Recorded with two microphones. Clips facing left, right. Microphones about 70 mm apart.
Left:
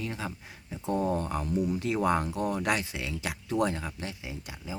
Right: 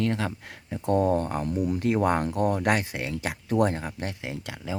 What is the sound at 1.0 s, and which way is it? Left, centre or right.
Speech, right.